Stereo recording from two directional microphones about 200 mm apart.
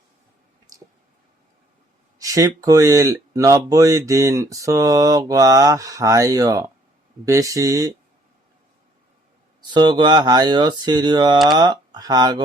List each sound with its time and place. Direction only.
2.1 s speech: 15° right (ahead or behind)
9.6 s speech: 20° right (ahead or behind)